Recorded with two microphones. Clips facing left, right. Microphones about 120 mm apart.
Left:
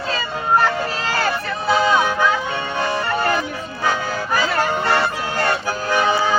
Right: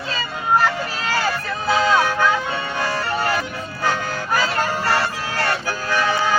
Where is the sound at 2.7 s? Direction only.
20° left (ahead or behind).